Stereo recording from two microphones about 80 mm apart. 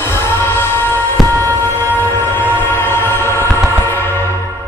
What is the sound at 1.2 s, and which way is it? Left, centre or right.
Music, right.